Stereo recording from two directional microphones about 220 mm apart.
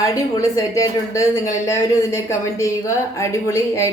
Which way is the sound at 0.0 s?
15° left (ahead or behind).